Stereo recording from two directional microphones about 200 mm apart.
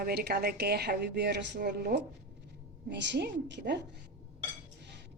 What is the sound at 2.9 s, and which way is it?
Speech, 60° right (ahead or behind).